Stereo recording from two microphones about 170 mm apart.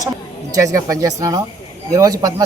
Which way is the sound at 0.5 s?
20° right (ahead or behind).